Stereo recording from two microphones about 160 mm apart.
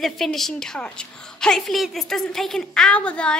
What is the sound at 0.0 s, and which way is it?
A woman's voice, centre (ahead or behind).